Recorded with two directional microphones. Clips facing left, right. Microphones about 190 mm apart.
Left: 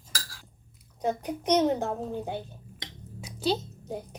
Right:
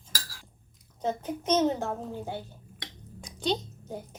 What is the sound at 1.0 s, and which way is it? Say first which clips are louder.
A child's voice: left 2 dB; 15° left (ahead or behind).